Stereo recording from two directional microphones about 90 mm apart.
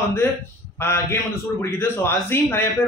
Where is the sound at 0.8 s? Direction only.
30° left (ahead or behind).